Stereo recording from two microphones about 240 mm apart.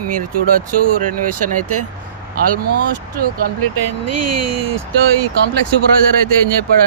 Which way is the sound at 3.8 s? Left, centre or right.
Right.